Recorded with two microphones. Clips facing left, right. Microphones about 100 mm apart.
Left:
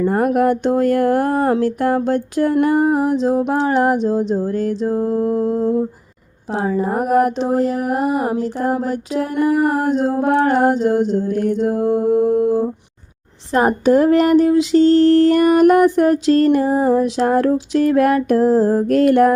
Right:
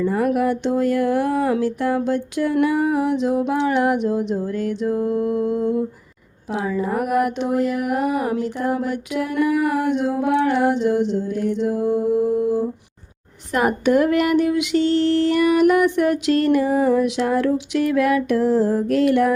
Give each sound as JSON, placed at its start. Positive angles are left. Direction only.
{"t": 0.0, "sound": "a sound", "side_deg": 50}
{"t": 3.5, "sound": "mantra", "side_deg": 40}
{"t": 13.5, "sound": "mantra", "side_deg": 35}